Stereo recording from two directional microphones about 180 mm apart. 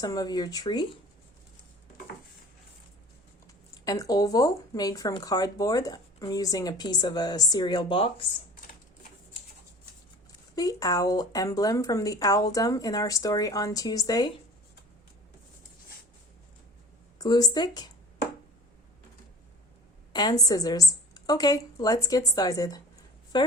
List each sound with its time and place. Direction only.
0.0 s speech: 20° left (ahead or behind)
3.4 s speech: 20° left (ahead or behind)
10.5 s speech: 20° left (ahead or behind)
17.2 s speech: 20° left (ahead or behind)
20.1 s speech: 20° left (ahead or behind)